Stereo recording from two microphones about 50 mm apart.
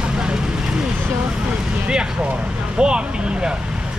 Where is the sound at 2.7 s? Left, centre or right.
Centre.